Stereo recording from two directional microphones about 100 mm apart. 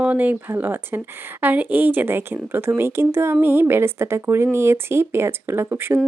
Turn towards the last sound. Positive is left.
turn(degrees=-25)  # may be behind; listen again after turning